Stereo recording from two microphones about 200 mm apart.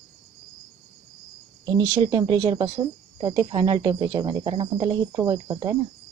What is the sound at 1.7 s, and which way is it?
Speech, 20° right (ahead or behind).